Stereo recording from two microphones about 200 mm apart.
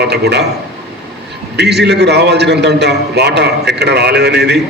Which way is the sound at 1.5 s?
55° right (ahead or behind).